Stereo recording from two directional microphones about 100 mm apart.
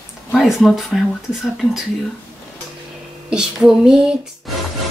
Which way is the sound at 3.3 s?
5° right (ahead or behind).